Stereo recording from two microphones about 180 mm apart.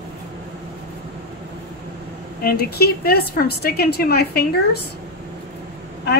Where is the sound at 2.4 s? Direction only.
60° left (ahead or behind).